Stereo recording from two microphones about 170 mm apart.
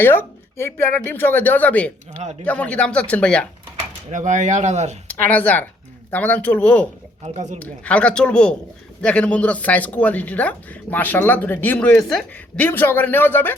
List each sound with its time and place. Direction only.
0.0 s speech: 15° left (ahead or behind)
4.1 s speech: 45° right (ahead or behind)
5.0 s speech: 10° left (ahead or behind)
7.3 s speech: 45° right (ahead or behind)
7.6 s speech: 10° left (ahead or behind)